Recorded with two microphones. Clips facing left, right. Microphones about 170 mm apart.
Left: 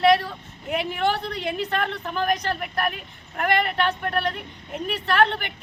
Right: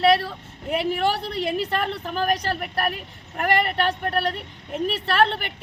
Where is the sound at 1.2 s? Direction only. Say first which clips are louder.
Right 2 dB; 35° right (ahead or behind).